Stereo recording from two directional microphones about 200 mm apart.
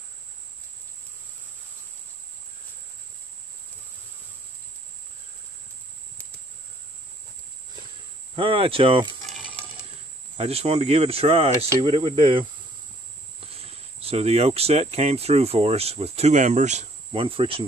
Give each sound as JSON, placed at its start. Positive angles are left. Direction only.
{"t": 8.4, "sound": "speech", "side_deg": -25}
{"t": 10.3, "sound": "speech", "side_deg": -30}
{"t": 13.5, "sound": "speech", "side_deg": -30}